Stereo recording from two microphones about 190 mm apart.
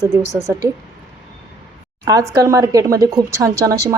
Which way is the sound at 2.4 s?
15° right (ahead or behind).